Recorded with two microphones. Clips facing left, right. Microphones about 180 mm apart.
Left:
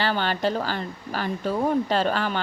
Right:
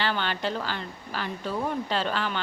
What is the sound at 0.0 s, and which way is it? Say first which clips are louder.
Speech: left 4 dB; 40° left (ahead or behind).